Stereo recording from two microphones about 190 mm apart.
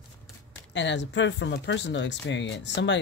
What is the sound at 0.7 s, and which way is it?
Speech, 70° left (ahead or behind).